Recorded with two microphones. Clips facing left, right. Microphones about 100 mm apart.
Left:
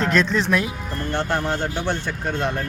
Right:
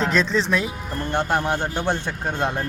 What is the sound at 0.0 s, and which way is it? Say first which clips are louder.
Speech: left 1 dB; centre (ahead or behind).